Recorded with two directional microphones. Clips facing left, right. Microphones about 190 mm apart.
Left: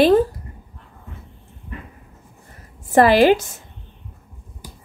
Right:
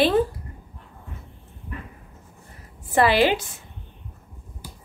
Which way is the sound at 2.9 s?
45° left (ahead or behind).